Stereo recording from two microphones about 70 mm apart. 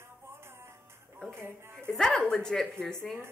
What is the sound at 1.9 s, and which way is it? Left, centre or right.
A woman's voice, centre.